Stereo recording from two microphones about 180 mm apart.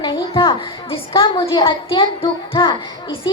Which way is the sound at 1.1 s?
25° left (ahead or behind).